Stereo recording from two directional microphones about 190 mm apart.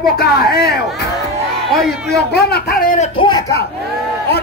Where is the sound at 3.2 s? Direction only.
20° left (ahead or behind).